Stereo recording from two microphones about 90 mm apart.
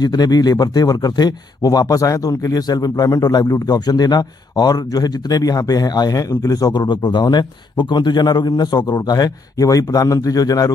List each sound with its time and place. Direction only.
0.0 s speech: 50° left (ahead or behind)